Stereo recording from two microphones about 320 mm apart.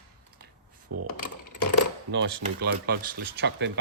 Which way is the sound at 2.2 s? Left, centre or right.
Right.